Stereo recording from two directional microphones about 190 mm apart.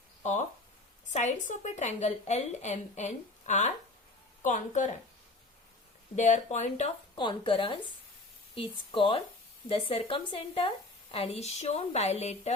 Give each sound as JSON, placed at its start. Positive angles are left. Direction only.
{"t": 0.2, "sound": "a woman's voice", "side_deg": 40}
{"t": 6.1, "sound": "a woman's voice", "side_deg": 40}
{"t": 7.2, "sound": "a woman's voice", "side_deg": 25}